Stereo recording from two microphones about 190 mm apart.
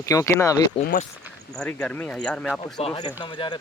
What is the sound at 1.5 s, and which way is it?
Speech, 5° left (ahead or behind).